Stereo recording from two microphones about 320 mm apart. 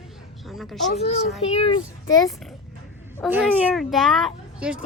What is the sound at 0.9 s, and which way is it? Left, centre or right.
A child's voice, centre.